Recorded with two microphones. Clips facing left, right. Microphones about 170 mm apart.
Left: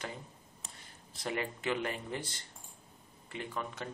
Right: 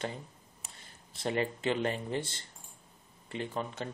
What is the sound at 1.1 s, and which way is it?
Speech, 30° right (ahead or behind).